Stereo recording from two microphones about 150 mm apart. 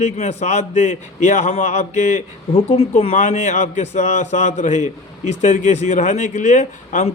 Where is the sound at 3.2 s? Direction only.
55° left (ahead or behind).